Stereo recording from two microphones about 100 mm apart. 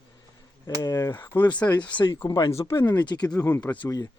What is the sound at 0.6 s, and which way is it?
Speech, 35° left (ahead or behind).